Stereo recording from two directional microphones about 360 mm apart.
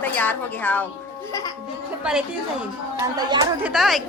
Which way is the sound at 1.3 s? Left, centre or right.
Centre.